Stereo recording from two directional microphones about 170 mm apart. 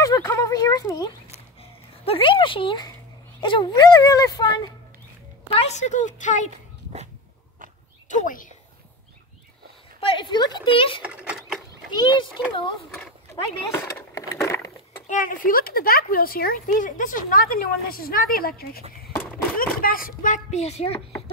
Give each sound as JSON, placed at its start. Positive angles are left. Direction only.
{"t": 0.0, "sound": "a sound", "side_deg": 15}
{"t": 1.3, "sound": "a sound", "side_deg": 35}
{"t": 3.3, "sound": "speech", "side_deg": 30}
{"t": 5.5, "sound": "speech", "side_deg": 40}
{"t": 8.1, "sound": "speech", "side_deg": 50}
{"t": 9.9, "sound": "speech", "side_deg": 30}
{"t": 11.1, "sound": "vehicle", "side_deg": -5}
{"t": 11.9, "sound": "speech", "side_deg": 25}
{"t": 13.7, "sound": "speech", "side_deg": 15}
{"t": 15.0, "sound": "speech", "side_deg": 50}